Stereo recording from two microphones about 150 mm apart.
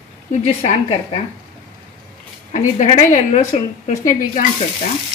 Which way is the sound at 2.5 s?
50° left (ahead or behind).